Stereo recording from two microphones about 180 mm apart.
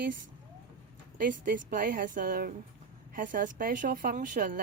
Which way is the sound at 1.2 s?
50° right (ahead or behind).